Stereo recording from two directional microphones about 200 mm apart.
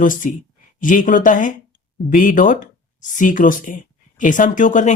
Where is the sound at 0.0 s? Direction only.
40° left (ahead or behind).